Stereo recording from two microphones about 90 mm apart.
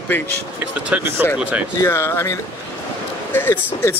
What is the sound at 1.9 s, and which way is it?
Speech, 30° left (ahead or behind).